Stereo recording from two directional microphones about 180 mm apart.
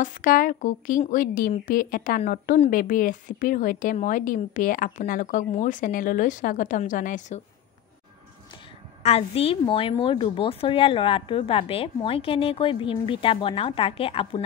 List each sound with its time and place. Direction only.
0.0 s a woman's voice: 50° left (ahead or behind)
9.0 s a woman's voice: 35° left (ahead or behind)